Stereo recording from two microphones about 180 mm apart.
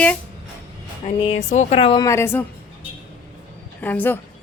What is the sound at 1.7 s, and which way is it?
Speech, 25° left (ahead or behind).